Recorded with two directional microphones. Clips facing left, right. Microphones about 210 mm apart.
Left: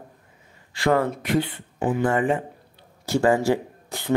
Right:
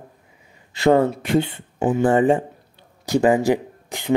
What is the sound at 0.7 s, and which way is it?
Speech, 25° right (ahead or behind).